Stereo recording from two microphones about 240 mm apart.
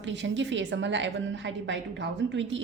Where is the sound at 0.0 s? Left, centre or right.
Right.